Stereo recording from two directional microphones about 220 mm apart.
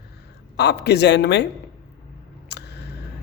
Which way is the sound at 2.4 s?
50° left (ahead or behind).